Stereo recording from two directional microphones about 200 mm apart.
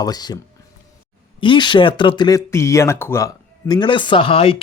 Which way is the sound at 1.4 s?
25° left (ahead or behind).